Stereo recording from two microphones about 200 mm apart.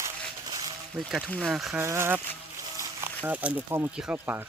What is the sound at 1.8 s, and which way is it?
Speech, 10° right (ahead or behind).